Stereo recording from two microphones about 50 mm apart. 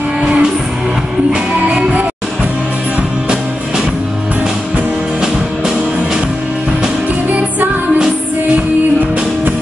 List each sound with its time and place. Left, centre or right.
0.2 s music: centre